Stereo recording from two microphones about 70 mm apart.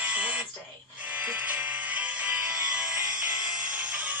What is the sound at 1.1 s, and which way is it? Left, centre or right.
Music, right.